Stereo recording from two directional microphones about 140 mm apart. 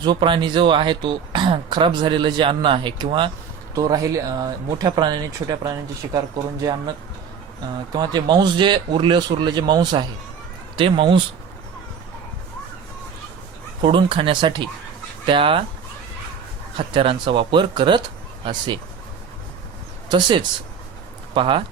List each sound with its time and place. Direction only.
0.0 s speech: 35° right (ahead or behind)
3.8 s speech: 25° right (ahead or behind)
7.9 s speech: 30° right (ahead or behind)
13.8 s speech: 40° right (ahead or behind)
16.7 s speech: 40° right (ahead or behind)
20.1 s speech: 35° right (ahead or behind)